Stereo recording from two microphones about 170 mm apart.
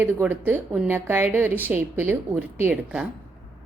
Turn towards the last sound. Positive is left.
turn(degrees=-10)  # may be behind; listen again after turning